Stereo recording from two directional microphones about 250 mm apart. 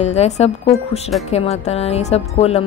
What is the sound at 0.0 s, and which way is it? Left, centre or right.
A woman's voice, left.